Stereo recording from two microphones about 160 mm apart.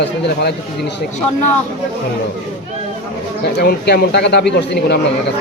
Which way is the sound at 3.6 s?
85° left.